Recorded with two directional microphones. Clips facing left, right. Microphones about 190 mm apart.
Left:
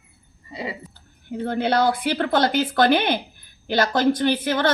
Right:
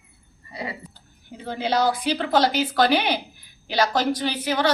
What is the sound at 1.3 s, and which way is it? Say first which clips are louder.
A woman's voice: left 4 dB; 55° left (ahead or behind).